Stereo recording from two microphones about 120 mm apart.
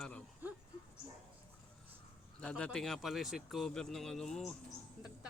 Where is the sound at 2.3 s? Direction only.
10° left (ahead or behind).